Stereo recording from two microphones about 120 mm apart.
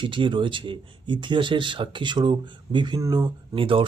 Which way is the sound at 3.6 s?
50° right (ahead or behind).